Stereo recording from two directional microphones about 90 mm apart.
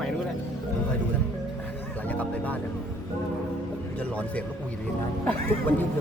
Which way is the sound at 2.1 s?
15° left (ahead or behind).